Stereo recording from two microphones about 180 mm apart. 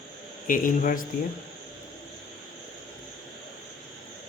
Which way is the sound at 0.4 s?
50° left (ahead or behind).